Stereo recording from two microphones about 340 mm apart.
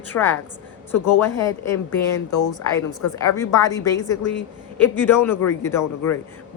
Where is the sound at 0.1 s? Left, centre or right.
Centre.